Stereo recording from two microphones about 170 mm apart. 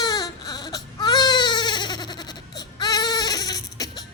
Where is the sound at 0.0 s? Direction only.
20° left (ahead or behind).